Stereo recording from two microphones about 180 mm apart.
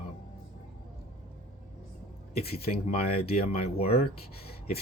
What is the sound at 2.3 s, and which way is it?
Speech, 60° left (ahead or behind).